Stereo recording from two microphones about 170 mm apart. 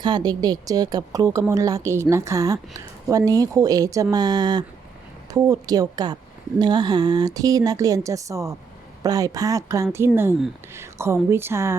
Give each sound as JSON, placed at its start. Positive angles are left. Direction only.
{"t": 0.0, "sound": "a woman's voice", "side_deg": -25}